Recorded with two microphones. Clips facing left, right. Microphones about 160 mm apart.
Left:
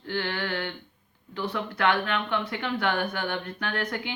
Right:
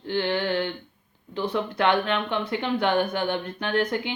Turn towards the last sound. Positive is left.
turn(degrees=-25)  # may be behind; listen again after turning